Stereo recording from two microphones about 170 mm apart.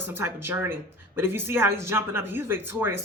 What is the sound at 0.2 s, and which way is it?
Speech, 15° right (ahead or behind).